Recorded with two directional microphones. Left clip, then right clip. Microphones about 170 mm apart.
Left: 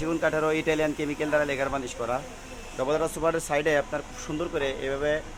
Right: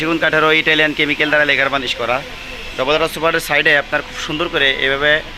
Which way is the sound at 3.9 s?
20° right (ahead or behind).